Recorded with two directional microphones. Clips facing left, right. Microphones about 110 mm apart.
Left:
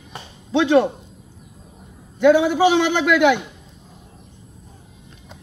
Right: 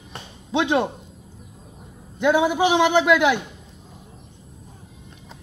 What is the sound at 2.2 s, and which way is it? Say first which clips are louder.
A man's voice: left 4 dB; 15° right (ahead or behind).